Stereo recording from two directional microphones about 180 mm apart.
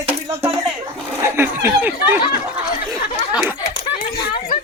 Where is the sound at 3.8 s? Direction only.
25° left (ahead or behind).